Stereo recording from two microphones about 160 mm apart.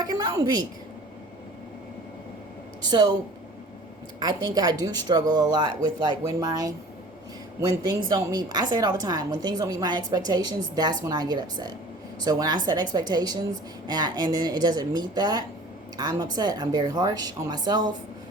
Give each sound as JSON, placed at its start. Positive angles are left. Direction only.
{"t": 0.0, "sound": "a sound", "side_deg": -25}
{"t": 2.9, "sound": "a woman's voice", "side_deg": -25}
{"t": 4.2, "sound": "a woman's voice", "side_deg": -25}
{"t": 7.9, "sound": "a woman's voice", "side_deg": -25}